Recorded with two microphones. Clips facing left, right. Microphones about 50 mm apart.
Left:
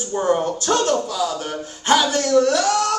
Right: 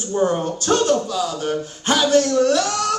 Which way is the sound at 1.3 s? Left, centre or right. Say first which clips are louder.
Right 3 dB; centre.